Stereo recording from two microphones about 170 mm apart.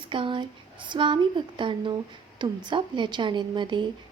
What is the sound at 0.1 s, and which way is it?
A woman's voice, 30° right (ahead or behind).